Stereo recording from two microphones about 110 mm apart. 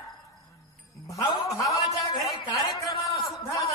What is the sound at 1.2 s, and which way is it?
Speech, 45° left (ahead or behind).